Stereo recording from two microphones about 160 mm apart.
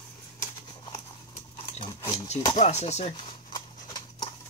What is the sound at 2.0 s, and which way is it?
Speech, 20° left (ahead or behind).